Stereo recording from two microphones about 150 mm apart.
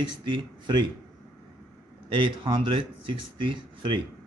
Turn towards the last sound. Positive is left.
turn(degrees=-30)  # may be behind; listen again after turning